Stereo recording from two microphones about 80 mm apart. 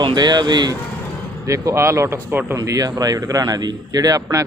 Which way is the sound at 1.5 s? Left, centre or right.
Right.